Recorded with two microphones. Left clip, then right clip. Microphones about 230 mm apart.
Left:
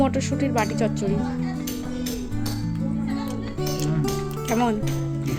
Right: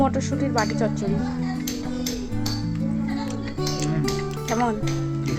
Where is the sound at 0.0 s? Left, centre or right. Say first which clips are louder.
Even; centre.